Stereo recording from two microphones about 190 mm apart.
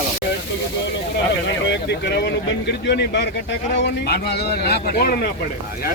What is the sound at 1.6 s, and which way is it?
A man's voice, 65° left (ahead or behind).